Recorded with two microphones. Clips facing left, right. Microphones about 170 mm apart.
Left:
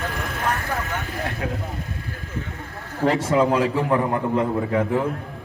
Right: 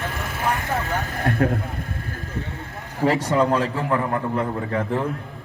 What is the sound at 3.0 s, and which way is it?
Speech, centre (ahead or behind).